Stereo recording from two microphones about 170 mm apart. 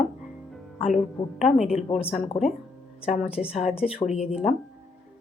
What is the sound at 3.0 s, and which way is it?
Speech, 40° left (ahead or behind).